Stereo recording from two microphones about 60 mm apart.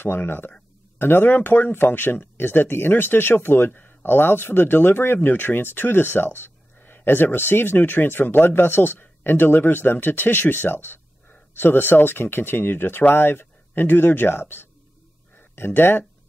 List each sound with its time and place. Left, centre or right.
0.0 s speech: left